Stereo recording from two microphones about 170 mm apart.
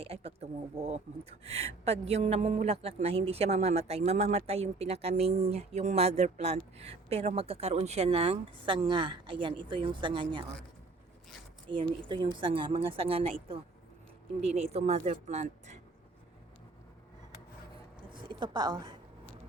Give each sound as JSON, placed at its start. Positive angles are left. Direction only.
{"t": 0.0, "sound": "speech", "side_deg": -35}
{"t": 11.7, "sound": "speech", "side_deg": -30}
{"t": 18.1, "sound": "a woman's voice", "side_deg": -30}